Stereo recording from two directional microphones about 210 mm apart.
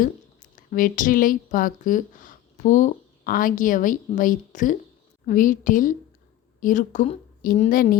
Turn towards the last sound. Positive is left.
turn(degrees=40)  # may be behind; listen again after turning